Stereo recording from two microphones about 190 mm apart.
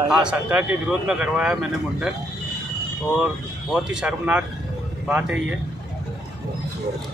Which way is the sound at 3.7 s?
5° right (ahead or behind).